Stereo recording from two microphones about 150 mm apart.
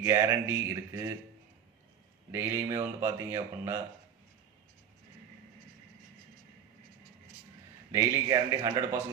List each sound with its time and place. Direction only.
0.0 s speech: 20° right (ahead or behind)
2.3 s speech: 15° right (ahead or behind)
7.9 s speech: 20° right (ahead or behind)